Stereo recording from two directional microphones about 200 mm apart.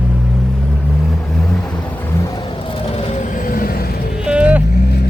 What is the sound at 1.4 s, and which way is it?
Vehicle, 5° left (ahead or behind).